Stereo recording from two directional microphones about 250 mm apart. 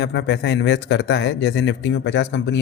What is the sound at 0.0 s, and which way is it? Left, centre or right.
Speech, left.